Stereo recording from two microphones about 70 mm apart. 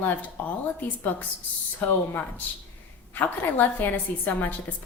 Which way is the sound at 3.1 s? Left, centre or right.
Left.